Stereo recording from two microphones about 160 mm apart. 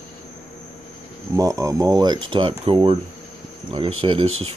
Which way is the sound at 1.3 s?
20° right (ahead or behind).